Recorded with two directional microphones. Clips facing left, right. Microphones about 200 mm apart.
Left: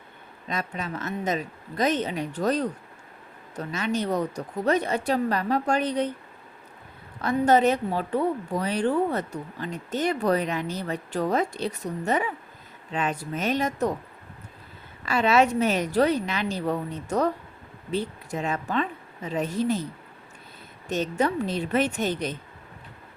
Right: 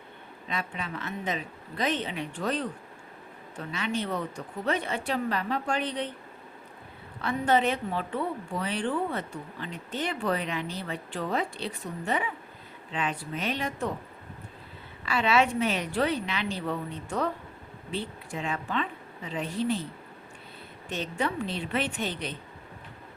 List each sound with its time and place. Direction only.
0.4 s a woman's voice: 40° left (ahead or behind)
7.2 s a woman's voice: 40° left (ahead or behind)
15.0 s a woman's voice: 45° left (ahead or behind)
20.9 s a woman's voice: 40° left (ahead or behind)